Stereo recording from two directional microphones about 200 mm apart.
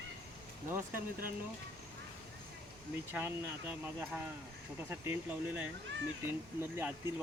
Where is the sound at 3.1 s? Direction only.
10° right (ahead or behind).